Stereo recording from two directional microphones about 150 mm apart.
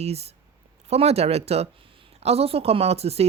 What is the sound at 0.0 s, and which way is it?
A woman's voice, 45° right (ahead or behind).